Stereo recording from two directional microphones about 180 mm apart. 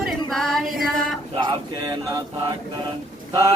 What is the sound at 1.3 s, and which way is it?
Speech, 25° right (ahead or behind).